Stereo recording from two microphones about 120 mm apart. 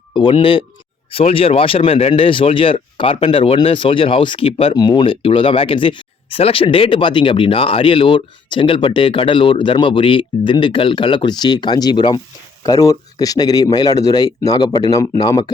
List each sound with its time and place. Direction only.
0.1 s speech: 45° left (ahead or behind)
12.6 s speech: 30° left (ahead or behind)